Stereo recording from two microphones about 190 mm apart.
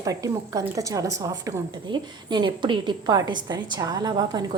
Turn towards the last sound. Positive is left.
turn(degrees=-20)  # may be behind; listen again after turning